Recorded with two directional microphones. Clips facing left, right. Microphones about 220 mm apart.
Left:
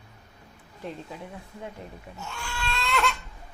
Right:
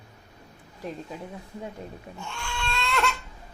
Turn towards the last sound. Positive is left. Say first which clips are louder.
# even
turn(degrees=0)  # may be behind; listen again after turning